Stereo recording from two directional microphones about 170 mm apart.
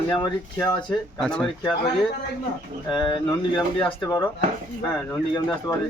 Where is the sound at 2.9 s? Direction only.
25° left (ahead or behind).